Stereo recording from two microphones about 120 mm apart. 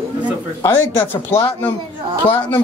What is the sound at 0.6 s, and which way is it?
Speech, 15° left (ahead or behind).